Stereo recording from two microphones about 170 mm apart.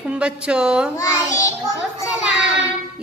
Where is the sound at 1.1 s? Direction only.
20° left (ahead or behind).